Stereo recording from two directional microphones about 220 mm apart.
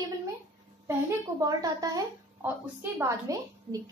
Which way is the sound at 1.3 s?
15° right (ahead or behind).